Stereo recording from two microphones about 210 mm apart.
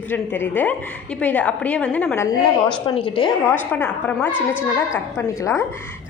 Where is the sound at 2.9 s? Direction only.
25° left (ahead or behind).